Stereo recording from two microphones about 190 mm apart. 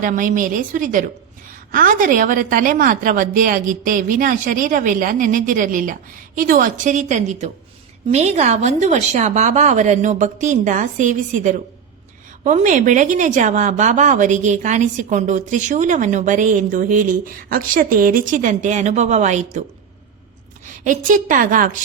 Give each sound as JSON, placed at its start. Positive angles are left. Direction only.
{"t": 0.0, "sound": "a woman's voice", "side_deg": -45}
{"t": 20.8, "sound": "a woman's voice", "side_deg": -45}